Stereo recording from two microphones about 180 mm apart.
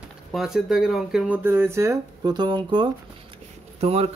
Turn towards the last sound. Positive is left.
turn(degrees=-35)  # may be behind; listen again after turning